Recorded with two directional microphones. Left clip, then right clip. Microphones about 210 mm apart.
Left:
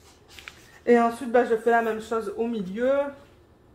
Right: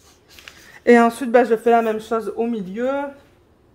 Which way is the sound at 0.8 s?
60° right (ahead or behind).